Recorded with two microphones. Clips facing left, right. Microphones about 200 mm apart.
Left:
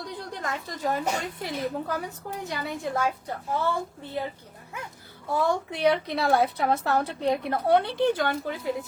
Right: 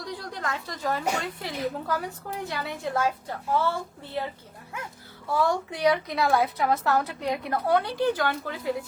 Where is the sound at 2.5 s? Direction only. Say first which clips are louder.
Left 2 dB; 15° left (ahead or behind).